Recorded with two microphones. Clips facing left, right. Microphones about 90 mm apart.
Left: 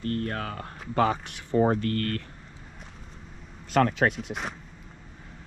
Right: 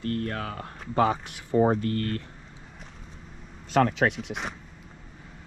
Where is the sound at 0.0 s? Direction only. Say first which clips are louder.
Even; 35° left (ahead or behind).